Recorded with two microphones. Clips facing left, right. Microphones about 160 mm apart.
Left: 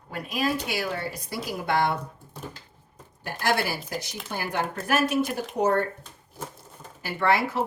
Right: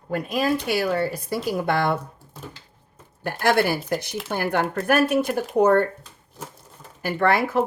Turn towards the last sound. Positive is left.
turn(degrees=-55)  # may be behind; listen again after turning